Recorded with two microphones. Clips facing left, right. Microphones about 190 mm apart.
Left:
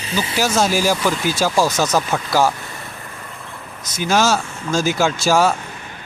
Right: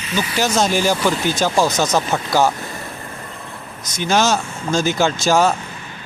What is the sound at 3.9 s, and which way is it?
Speech, 5° left (ahead or behind).